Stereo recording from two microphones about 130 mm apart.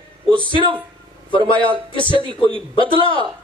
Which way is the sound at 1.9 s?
40° left (ahead or behind).